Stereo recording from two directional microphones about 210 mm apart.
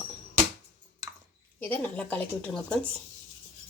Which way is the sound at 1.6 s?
10° left (ahead or behind).